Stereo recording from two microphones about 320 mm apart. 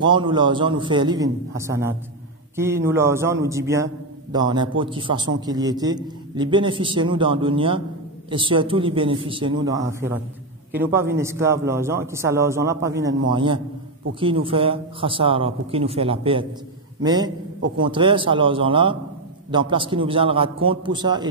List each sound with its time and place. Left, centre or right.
0.0 s a man's voice: centre